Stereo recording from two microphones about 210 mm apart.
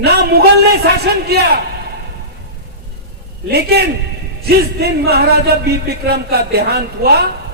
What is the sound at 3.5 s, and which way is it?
Speech, 50° right (ahead or behind).